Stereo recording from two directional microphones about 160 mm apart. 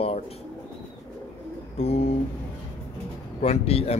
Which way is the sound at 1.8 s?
40° left (ahead or behind).